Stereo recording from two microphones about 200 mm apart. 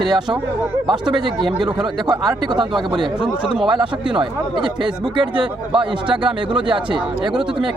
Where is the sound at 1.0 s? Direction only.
25° right (ahead or behind).